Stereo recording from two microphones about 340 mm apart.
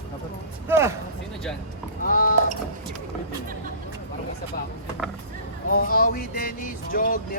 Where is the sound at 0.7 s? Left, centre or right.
Centre.